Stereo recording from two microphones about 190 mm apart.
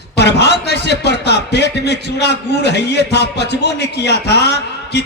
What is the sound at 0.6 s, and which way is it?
A man's voice, 60° left (ahead or behind).